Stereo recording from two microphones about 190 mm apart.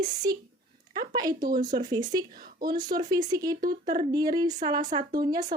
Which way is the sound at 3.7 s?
50° right (ahead or behind).